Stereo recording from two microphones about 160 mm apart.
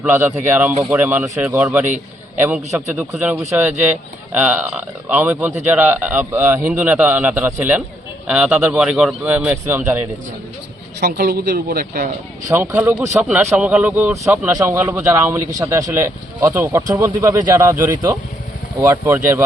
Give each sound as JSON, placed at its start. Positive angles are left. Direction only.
{"t": 0.0, "sound": "speech", "side_deg": -15}
{"t": 4.4, "sound": "speech", "side_deg": -10}
{"t": 11.0, "sound": "speech", "side_deg": -70}
{"t": 12.5, "sound": "speech", "side_deg": -15}